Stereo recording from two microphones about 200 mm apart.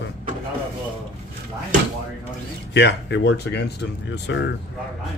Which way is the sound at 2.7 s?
60° left (ahead or behind).